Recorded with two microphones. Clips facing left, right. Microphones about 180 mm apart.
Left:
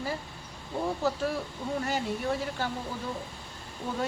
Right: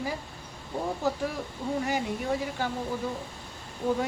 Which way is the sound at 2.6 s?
15° right (ahead or behind).